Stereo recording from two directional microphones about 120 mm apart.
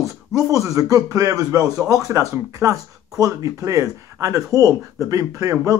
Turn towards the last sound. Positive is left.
turn(degrees=-30)  # may be behind; listen again after turning